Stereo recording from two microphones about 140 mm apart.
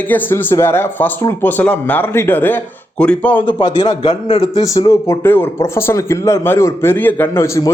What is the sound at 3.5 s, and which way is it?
A man's voice, 20° left (ahead or behind).